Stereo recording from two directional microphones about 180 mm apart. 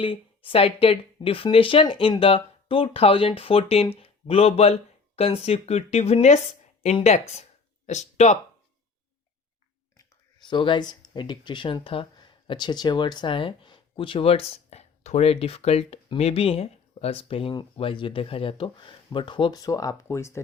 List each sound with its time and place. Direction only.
0.0 s speech: 30° left (ahead or behind)
10.0 s speech: 25° left (ahead or behind)